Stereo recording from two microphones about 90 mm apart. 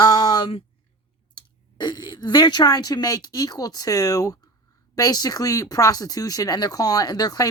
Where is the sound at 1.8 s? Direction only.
55° left (ahead or behind).